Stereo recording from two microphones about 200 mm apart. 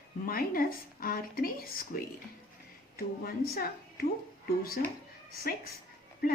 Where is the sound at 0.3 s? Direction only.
45° left (ahead or behind).